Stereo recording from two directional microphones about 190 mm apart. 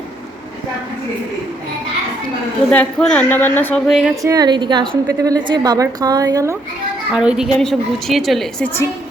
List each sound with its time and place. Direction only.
2.6 s speech: 5° left (ahead or behind)
4.2 s a woman's voice: 20° right (ahead or behind)
7.1 s a woman's voice: 5° right (ahead or behind)